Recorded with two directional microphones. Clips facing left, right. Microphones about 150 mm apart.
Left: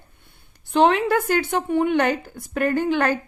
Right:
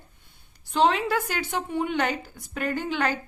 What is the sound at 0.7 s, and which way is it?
A woman's voice, 60° left (ahead or behind).